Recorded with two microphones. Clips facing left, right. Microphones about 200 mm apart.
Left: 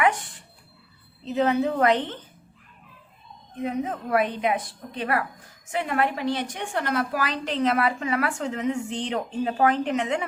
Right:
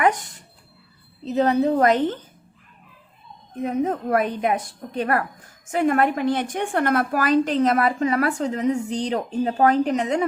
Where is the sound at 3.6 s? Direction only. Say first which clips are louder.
Right 5 dB; 45° right (ahead or behind).